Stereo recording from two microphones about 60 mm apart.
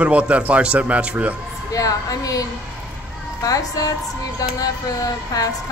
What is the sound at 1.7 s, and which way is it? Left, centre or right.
Speech, left.